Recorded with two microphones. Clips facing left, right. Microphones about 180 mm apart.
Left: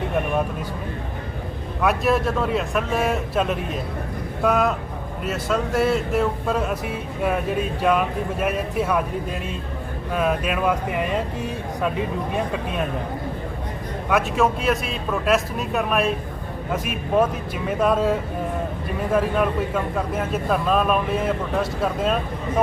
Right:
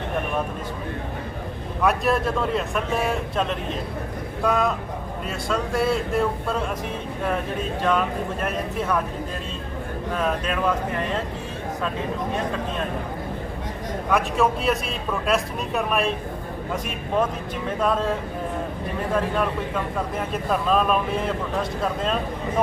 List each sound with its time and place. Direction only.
1.8 s a man's voice: centre (ahead or behind)
10.2 s a man's voice: 10° left (ahead or behind)
14.1 s a man's voice: centre (ahead or behind)